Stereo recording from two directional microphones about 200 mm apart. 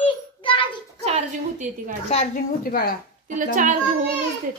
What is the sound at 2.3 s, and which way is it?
Speech, 50° left (ahead or behind).